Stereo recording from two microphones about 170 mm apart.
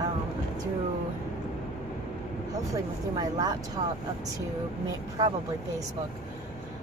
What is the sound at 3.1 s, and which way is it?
Speech, 25° right (ahead or behind).